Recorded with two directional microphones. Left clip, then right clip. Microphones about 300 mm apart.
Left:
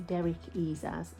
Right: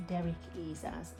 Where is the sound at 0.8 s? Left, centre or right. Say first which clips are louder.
Left 4 dB; left.